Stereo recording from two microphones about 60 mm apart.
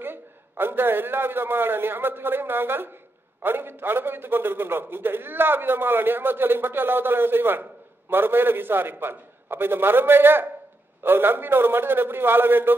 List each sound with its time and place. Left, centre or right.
0.0 s a man's voice: right